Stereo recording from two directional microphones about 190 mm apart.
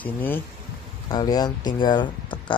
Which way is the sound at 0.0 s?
10° left (ahead or behind).